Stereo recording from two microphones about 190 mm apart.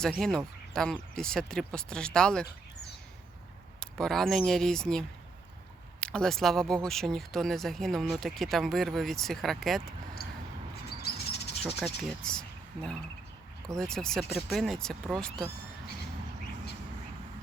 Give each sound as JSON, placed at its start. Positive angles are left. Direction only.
{"t": 0.0, "sound": "speech", "side_deg": 5}
{"t": 3.8, "sound": "speech", "side_deg": 0}
{"t": 10.2, "sound": "a sound", "side_deg": 55}
{"t": 11.6, "sound": "speech", "side_deg": 0}